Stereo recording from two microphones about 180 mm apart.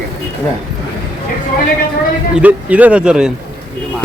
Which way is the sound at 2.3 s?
10° right (ahead or behind).